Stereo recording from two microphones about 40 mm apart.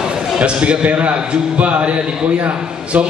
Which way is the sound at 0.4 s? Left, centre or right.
Right.